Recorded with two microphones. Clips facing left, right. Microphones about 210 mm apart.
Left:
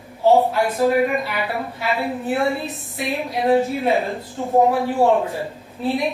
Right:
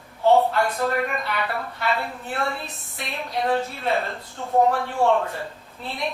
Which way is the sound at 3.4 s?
15° left (ahead or behind).